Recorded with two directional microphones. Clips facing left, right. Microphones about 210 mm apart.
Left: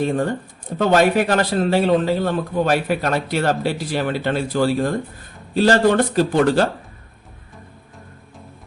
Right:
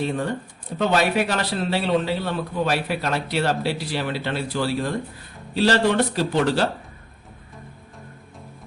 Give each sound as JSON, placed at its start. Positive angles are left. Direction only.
{"t": 0.0, "sound": "a man's voice", "side_deg": 45}